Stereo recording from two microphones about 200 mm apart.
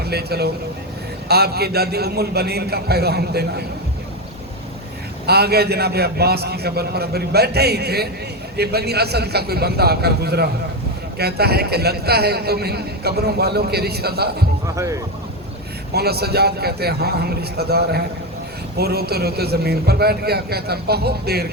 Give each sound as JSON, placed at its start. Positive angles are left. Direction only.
{"t": 0.0, "sound": "a man's voice", "side_deg": -50}
{"t": 5.2, "sound": "a man's voice", "side_deg": -55}
{"t": 14.8, "sound": "speech", "side_deg": -15}
{"t": 15.9, "sound": "a man's voice", "side_deg": -50}